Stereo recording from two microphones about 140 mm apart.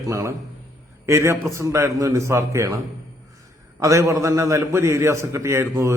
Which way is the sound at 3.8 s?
20° right (ahead or behind).